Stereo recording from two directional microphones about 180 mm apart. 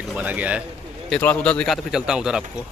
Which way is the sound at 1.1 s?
10° left (ahead or behind).